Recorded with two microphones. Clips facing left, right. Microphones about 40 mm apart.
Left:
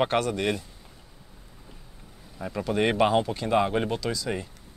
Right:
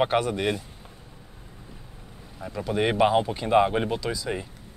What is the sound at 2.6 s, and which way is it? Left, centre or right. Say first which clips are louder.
Speech: right 1 dB; centre.